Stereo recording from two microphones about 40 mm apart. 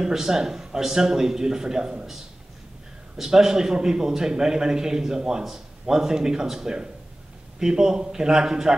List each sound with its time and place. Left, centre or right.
0.0 s a man's voice: centre
3.2 s a man's voice: centre